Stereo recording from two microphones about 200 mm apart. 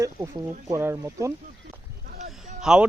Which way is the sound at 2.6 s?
5° right (ahead or behind).